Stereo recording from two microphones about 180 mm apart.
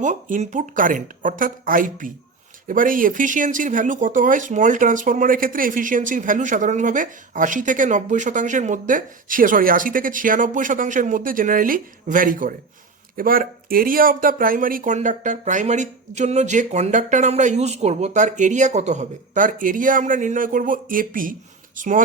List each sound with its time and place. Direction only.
0.0 s speech: 45° right (ahead or behind)